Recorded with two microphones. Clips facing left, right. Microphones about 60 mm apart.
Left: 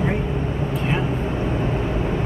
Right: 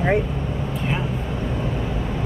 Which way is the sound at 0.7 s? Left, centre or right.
Centre.